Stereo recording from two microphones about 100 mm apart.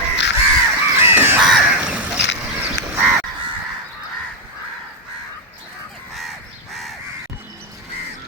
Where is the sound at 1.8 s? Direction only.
10° right (ahead or behind).